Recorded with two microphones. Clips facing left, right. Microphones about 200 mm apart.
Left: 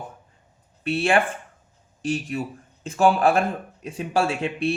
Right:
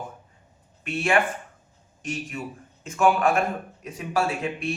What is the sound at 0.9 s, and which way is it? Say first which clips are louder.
Speech: left 2 dB; 30° left (ahead or behind).